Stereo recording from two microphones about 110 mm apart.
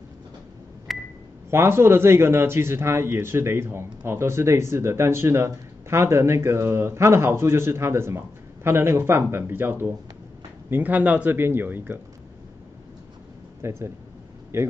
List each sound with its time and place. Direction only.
0.9 s a sound: centre (ahead or behind)
1.5 s speech: 25° right (ahead or behind)
13.6 s speech: 25° right (ahead or behind)